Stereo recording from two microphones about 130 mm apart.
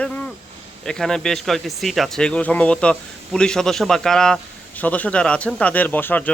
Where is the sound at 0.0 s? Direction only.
10° left (ahead or behind).